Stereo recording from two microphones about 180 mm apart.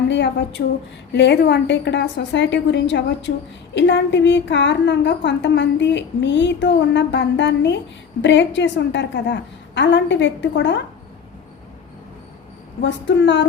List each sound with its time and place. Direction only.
0.1 s a woman's voice: 80° left
12.8 s a woman's voice: 80° left